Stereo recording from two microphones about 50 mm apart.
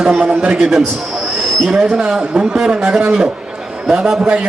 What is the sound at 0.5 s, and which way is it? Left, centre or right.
A man's voice, centre.